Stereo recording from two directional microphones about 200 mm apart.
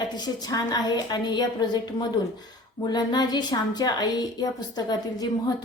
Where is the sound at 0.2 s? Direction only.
20° left (ahead or behind).